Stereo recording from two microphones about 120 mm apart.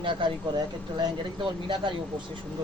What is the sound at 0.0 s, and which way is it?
Speech, 45° right (ahead or behind).